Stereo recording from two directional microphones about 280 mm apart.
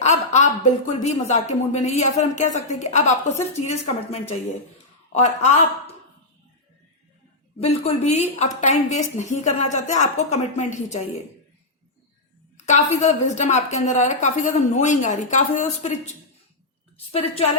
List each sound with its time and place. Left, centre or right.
0.0 s a woman's voice: left
7.6 s a woman's voice: left
12.5 s a woman's voice: left
17.1 s a woman's voice: left